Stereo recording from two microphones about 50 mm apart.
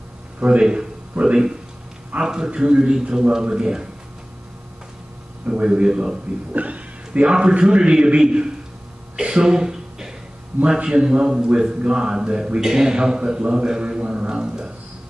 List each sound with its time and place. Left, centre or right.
0.4 s a man's voice: centre
5.5 s a man's voice: centre
6.5 s a man's voice: right
9.1 s a sound: centre
10.6 s a man's voice: centre